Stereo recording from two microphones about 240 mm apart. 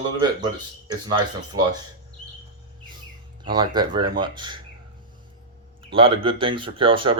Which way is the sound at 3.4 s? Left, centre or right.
Centre.